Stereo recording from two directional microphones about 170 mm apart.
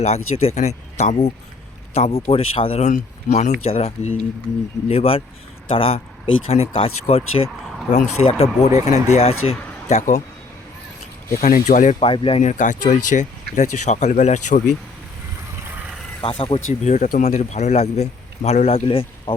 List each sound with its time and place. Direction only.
0.0 s speech: 40° left (ahead or behind)
11.3 s speech: 50° left (ahead or behind)
12.0 s speech: 30° left (ahead or behind)
12.4 s speech: 45° left (ahead or behind)
15.7 s vehicle: 5° right (ahead or behind)
16.4 s speech: 30° left (ahead or behind)
16.9 s speech: 50° left (ahead or behind); by 19.3 s 30° left (ahead or behind)